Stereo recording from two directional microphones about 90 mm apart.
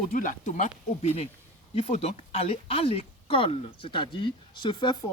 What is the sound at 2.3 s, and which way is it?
Speech, 90° left.